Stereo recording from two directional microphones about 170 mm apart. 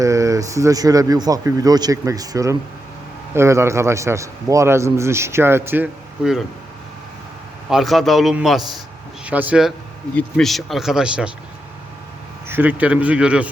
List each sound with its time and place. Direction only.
0.0 s a man's voice: 20° right (ahead or behind)
7.7 s a man's voice: centre (ahead or behind)
12.5 s a man's voice: 10° right (ahead or behind)